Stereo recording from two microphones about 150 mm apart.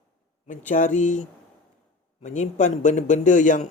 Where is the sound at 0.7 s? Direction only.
55° left (ahead or behind).